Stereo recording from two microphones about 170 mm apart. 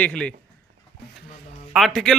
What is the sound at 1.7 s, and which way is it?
Speech, centre (ahead or behind).